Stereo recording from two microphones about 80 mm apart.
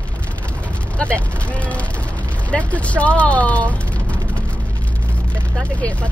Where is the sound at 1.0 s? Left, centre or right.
Centre.